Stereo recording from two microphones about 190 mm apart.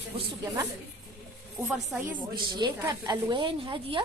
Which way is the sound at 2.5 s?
20° right (ahead or behind).